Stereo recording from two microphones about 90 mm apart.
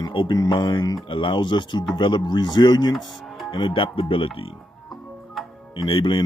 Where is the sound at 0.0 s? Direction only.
70° left (ahead or behind).